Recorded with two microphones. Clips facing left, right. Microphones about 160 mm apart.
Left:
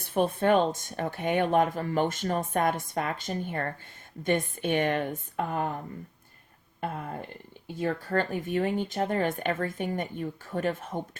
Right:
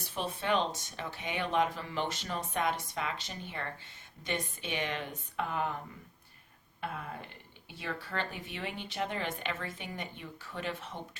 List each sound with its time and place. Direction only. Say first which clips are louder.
0.0 s speech: left 11 dB; 55° left (ahead or behind)
6.8 s speech: left 6 dB; 45° left (ahead or behind)